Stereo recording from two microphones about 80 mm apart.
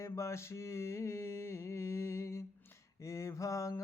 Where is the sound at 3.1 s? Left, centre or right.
Left.